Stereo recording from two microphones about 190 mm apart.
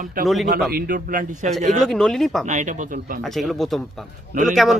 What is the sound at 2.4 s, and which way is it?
Speech, 40° right (ahead or behind).